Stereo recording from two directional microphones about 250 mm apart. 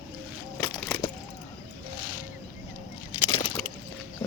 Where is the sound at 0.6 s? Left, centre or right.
Centre.